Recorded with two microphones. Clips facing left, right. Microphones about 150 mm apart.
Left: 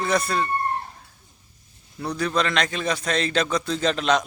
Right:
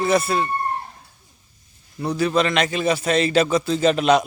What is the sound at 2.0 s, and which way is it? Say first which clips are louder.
A man's voice: right 4 dB; 5° right (ahead or behind).